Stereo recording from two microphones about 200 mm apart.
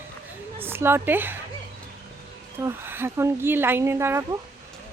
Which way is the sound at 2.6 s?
10° right (ahead or behind).